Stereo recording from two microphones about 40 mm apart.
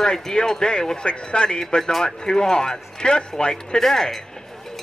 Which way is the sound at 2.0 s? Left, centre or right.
Centre.